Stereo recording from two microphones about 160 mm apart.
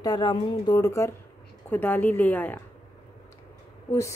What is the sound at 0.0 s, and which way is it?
Speech, 25° left (ahead or behind).